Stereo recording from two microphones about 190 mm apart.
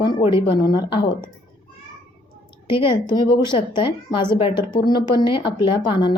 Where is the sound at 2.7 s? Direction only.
25° left (ahead or behind).